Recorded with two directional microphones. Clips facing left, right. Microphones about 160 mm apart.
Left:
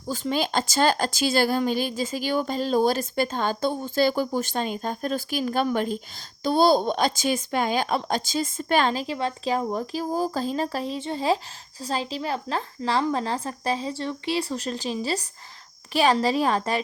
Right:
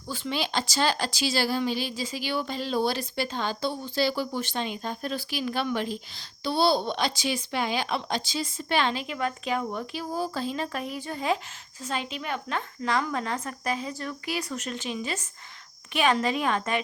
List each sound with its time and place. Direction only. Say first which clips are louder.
0.1 s speech: left 5 dB; 40° left (ahead or behind)